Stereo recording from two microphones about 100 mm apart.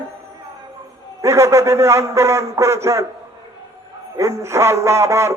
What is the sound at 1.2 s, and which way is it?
A man's voice, 30° right (ahead or behind).